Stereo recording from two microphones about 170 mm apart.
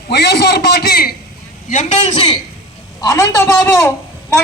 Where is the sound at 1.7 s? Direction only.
45° left (ahead or behind).